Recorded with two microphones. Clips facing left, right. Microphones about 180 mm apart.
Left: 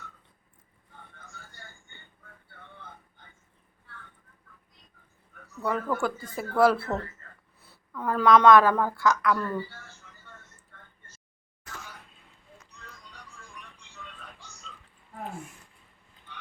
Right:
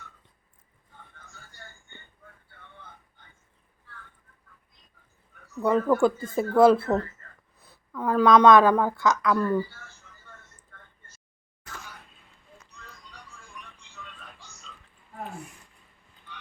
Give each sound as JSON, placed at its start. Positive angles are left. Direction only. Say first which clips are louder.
{"t": 5.6, "sound": "a woman's voice", "louder": "right 7 dB", "side_deg": -20}